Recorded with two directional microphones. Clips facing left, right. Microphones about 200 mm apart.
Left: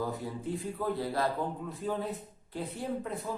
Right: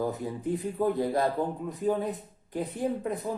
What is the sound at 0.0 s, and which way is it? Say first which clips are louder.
Speech: right 4 dB; 20° right (ahead or behind).